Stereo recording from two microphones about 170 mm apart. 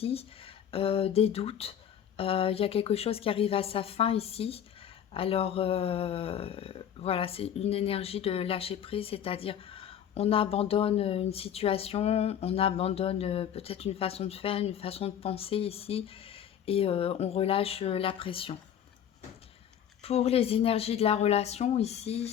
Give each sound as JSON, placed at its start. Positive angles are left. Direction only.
{"t": 0.0, "sound": "speech", "side_deg": 35}
{"t": 20.0, "sound": "speech", "side_deg": 40}